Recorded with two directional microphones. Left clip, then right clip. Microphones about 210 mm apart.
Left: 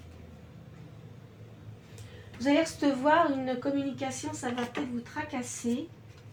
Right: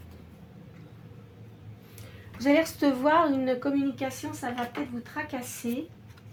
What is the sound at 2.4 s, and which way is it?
A woman's voice, 45° right (ahead or behind).